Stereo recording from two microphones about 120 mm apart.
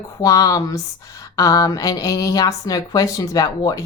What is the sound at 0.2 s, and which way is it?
A woman's voice, 30° left (ahead or behind).